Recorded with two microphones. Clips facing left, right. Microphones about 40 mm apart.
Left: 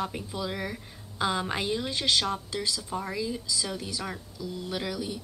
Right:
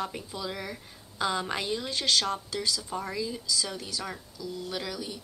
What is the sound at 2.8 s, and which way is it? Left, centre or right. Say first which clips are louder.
Speech: left 1 dB; centre.